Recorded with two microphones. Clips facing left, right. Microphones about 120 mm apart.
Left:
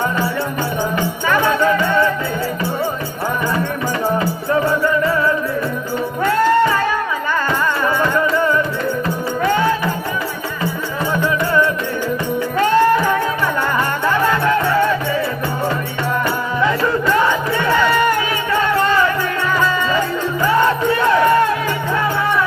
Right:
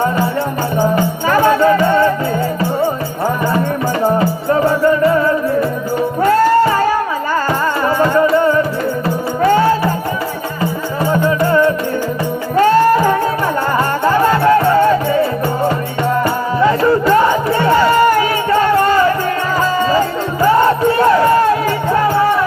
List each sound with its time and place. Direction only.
0.9 s music: 40° right (ahead or behind)
4.6 s music: 30° right (ahead or behind)
11.1 s music: 35° right (ahead or behind)
20.4 s music: 40° right (ahead or behind)